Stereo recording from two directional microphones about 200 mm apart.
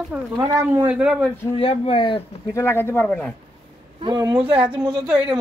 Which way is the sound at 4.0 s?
20° right (ahead or behind).